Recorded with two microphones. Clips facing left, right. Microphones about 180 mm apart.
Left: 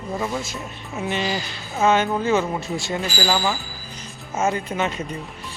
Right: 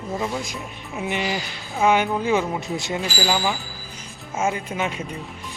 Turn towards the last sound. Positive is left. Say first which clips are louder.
# left 2 dB
turn(degrees=-10)  # may be behind; listen again after turning